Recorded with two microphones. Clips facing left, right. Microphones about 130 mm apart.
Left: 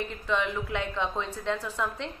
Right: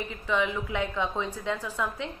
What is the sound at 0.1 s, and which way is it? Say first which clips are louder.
A woman's voice: right 4 dB; 5° right (ahead or behind).